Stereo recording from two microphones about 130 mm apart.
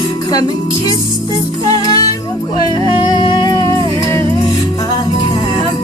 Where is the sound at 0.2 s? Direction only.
30° left (ahead or behind).